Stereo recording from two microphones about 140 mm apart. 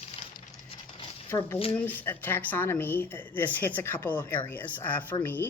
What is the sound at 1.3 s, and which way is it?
Speech, 15° left (ahead or behind).